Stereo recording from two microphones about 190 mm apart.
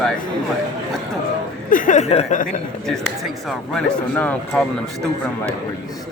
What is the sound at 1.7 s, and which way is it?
Speech, 45° left (ahead or behind).